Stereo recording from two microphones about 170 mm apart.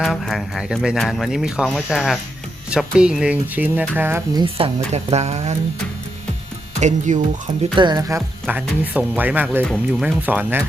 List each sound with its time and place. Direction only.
0.0 s speech: centre (ahead or behind)
4.4 s speech: 30° right (ahead or behind)
6.7 s speech: 45° right (ahead or behind)
7.8 s speech: 25° right (ahead or behind)
8.4 s speech: 10° right (ahead or behind)
9.6 s speech: centre (ahead or behind)
10.2 s speech: 10° right (ahead or behind)